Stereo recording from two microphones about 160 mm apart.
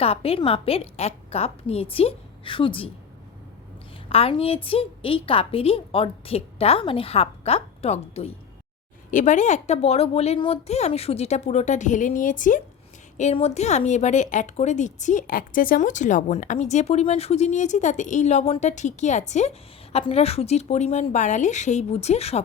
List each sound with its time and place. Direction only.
0.0 s a woman's voice: 40° left (ahead or behind)
4.1 s a woman's voice: 35° left (ahead or behind)
9.0 s speech: 50° left (ahead or behind)
13.3 s speech: 40° left (ahead or behind)